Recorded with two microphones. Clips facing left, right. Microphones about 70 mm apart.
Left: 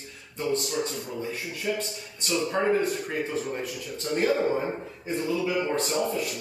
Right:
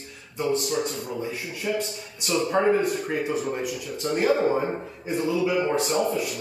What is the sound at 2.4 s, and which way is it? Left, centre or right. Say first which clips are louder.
Speech: right 4 dB; right.